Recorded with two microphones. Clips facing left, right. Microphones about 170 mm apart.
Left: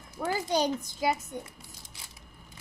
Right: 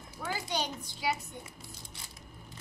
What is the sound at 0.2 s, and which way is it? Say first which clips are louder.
Speech: left 7 dB; 40° left (ahead or behind).